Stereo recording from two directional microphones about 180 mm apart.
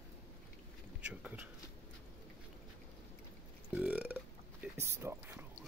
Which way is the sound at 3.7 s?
5° right (ahead or behind).